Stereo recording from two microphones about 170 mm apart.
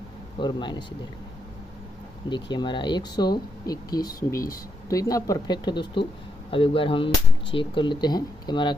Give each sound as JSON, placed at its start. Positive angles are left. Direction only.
{"t": 0.4, "sound": "speech", "side_deg": 25}
{"t": 2.2, "sound": "speech", "side_deg": 25}